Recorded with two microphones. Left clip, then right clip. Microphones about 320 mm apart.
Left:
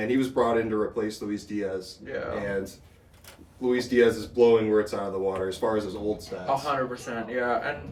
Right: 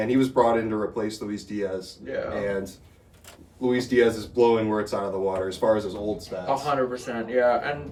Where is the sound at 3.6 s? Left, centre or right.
Centre.